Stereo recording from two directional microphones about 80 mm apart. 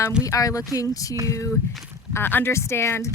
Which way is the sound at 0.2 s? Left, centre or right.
Left.